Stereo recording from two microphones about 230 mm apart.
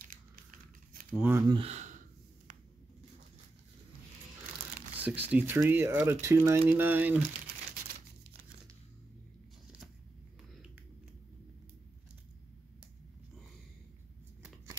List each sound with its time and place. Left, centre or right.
0.1 s a sound: right
1.1 s speech: centre
1.5 s speech: right
4.9 s speech: centre